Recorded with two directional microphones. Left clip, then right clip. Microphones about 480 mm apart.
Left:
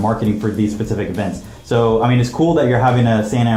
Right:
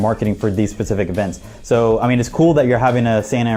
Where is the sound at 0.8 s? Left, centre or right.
Right.